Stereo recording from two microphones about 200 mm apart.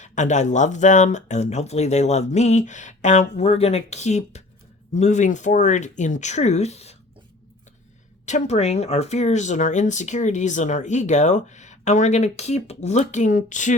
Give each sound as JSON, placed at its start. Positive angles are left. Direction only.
{"t": 0.0, "sound": "speech", "side_deg": 35}
{"t": 8.2, "sound": "speech", "side_deg": 35}